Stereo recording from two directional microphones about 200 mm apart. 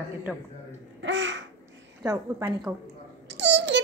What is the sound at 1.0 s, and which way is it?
Babbling, 65° right (ahead or behind).